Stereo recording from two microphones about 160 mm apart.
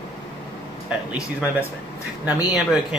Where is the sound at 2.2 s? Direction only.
10° right (ahead or behind).